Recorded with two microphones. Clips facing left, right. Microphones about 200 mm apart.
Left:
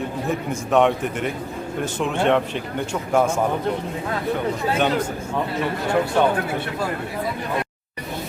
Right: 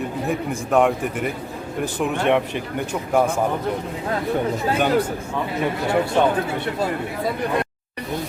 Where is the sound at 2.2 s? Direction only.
10° right (ahead or behind).